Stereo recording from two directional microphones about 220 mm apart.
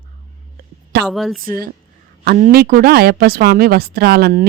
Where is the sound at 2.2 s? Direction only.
40° right (ahead or behind).